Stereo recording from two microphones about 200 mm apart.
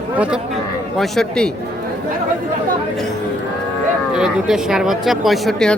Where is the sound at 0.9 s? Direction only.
Centre (ahead or behind).